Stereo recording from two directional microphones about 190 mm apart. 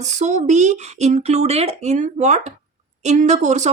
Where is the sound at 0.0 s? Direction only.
40° right (ahead or behind).